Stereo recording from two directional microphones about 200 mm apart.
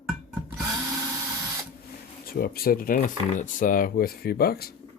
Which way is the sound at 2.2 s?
50° left (ahead or behind).